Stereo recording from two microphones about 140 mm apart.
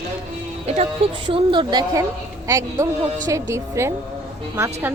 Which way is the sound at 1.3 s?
35° right (ahead or behind).